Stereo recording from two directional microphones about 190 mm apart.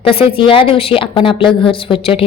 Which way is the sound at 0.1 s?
30° left (ahead or behind).